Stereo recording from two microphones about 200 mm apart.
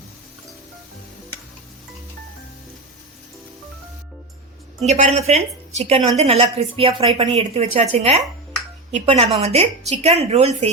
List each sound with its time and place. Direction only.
4.8 s a woman's voice: 35° right (ahead or behind)